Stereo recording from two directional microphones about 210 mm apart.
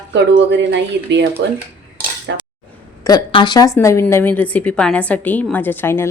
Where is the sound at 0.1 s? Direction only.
55° right (ahead or behind).